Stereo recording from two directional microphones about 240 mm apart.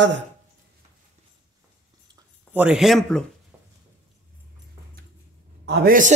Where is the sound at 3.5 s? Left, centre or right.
Centre.